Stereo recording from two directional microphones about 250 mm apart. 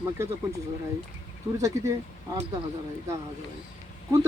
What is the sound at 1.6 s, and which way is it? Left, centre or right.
Speech, centre.